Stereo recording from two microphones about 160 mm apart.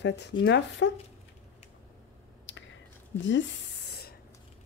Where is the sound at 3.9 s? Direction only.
75° left (ahead or behind).